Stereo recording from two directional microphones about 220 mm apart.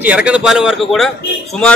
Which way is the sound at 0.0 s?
5° right (ahead or behind).